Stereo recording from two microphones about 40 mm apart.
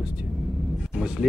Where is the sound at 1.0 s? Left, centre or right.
Centre.